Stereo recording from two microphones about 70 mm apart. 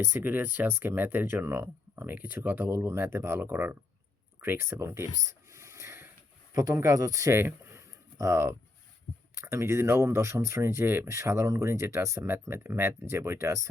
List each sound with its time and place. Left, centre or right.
0.0 s speech: right
2.6 s speech: right
3.5 s speech: right
5.2 s a sound: right
6.5 s speech: right
7.3 s a sound: right
9.4 s speech: right